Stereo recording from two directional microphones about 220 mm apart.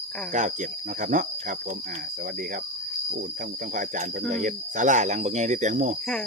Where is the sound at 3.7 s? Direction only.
35° right (ahead or behind).